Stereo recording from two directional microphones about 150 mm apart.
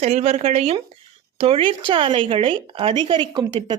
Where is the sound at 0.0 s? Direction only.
45° right (ahead or behind).